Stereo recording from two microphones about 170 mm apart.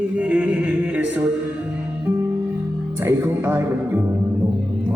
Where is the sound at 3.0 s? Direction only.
15° right (ahead or behind).